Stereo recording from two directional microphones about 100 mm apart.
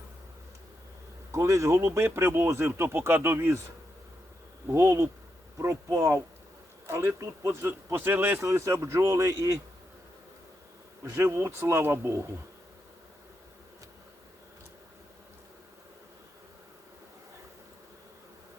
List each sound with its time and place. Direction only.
1.3 s speech: 30° right (ahead or behind)
4.7 s speech: 30° right (ahead or behind)
11.0 s speech: 30° right (ahead or behind)